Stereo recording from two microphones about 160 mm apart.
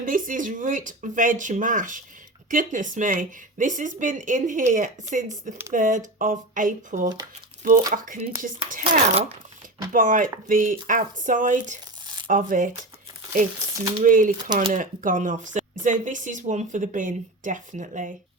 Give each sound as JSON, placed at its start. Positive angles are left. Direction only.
{"t": 0.0, "sound": "speech", "side_deg": -55}
{"t": 8.8, "sound": "speech", "side_deg": -40}
{"t": 9.9, "sound": "speech", "side_deg": -55}
{"t": 14.0, "sound": "speech", "side_deg": -55}